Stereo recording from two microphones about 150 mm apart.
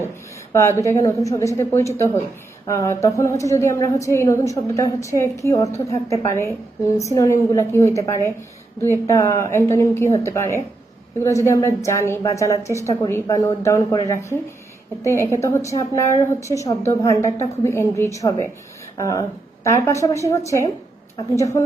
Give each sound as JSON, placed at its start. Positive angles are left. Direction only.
{"t": 0.5, "sound": "a woman's voice", "side_deg": 20}